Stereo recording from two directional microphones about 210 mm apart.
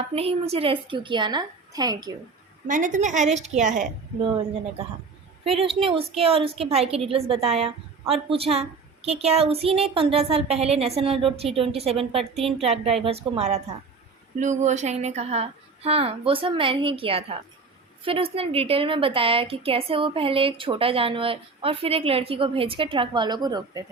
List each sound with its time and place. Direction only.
0.1 s a woman's voice: 30° right (ahead or behind)
2.6 s a woman's voice: 40° right (ahead or behind)
5.5 s a woman's voice: 25° right (ahead or behind)